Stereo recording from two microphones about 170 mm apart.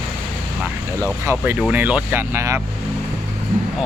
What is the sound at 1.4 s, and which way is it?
Speech, 10° right (ahead or behind).